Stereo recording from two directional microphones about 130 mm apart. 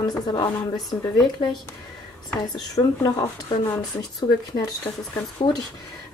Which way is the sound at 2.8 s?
35° left (ahead or behind).